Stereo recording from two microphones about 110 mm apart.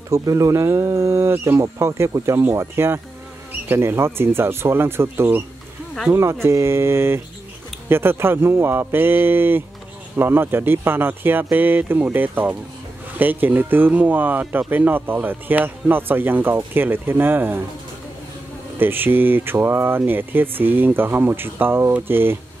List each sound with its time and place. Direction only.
0.1 s speech: 30° right (ahead or behind)
6.4 s speech: 25° right (ahead or behind)
18.8 s speech: 20° right (ahead or behind)